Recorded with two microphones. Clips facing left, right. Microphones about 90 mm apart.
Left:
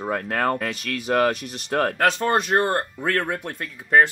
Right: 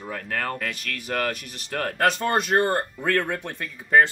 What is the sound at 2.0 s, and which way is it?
Speech, 5° left (ahead or behind).